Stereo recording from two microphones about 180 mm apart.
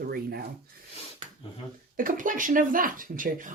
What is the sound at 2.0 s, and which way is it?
Speech, 50° right (ahead or behind).